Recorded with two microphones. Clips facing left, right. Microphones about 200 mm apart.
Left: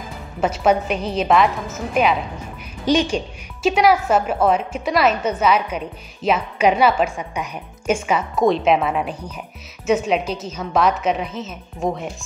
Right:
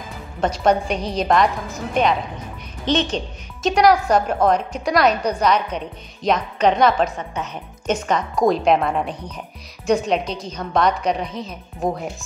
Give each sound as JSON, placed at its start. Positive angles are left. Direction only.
{"t": 0.4, "sound": "a woman's voice", "side_deg": 5}